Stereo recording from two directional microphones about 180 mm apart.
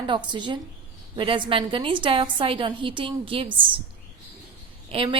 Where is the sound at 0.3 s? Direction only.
25° right (ahead or behind).